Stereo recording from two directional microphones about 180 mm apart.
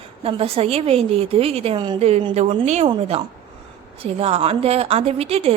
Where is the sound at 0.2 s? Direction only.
30° right (ahead or behind).